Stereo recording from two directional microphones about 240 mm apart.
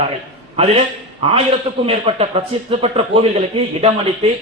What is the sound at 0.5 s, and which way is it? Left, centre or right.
A man's voice, right.